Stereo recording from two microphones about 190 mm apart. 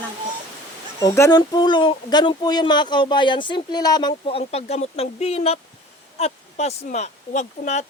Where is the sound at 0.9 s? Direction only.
15° left (ahead or behind).